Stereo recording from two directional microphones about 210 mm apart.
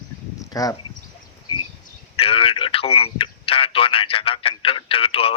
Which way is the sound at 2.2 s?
25° left (ahead or behind).